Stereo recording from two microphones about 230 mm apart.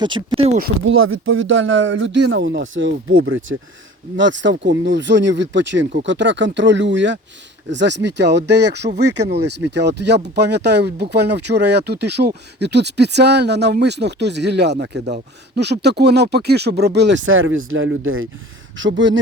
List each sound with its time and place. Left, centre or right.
0.3 s speech: right
0.9 s speech: right